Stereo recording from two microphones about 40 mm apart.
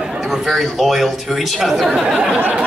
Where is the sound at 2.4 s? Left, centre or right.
Right.